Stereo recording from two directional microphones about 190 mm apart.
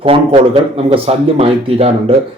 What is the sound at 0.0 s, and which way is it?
Speech, 30° right (ahead or behind).